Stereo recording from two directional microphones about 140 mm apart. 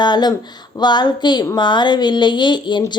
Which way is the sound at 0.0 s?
30° left (ahead or behind).